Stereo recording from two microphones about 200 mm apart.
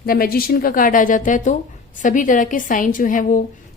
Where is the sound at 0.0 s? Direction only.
45° left (ahead or behind).